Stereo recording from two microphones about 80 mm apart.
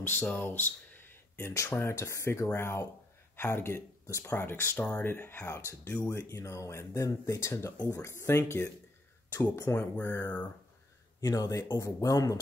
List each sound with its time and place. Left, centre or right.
0.0 s speech: left
9.8 s speech: left
11.1 s speech: left